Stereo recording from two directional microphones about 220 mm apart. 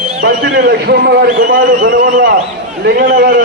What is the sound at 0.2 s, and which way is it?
A man's voice, 45° right (ahead or behind).